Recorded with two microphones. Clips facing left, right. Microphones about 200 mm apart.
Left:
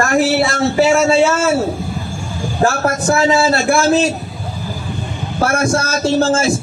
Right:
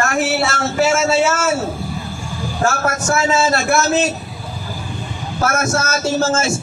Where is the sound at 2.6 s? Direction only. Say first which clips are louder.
Left 4 dB; 35° left (ahead or behind).